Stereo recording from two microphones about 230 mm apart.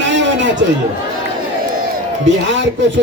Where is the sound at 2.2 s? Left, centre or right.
Right.